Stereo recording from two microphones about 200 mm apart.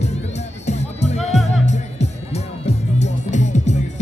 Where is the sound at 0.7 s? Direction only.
35° left (ahead or behind).